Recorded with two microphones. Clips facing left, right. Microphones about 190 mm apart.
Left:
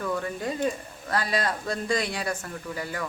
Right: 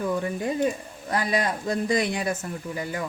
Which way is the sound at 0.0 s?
20° right (ahead or behind).